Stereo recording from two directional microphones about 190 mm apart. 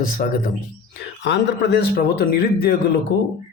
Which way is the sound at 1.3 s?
65° left (ahead or behind).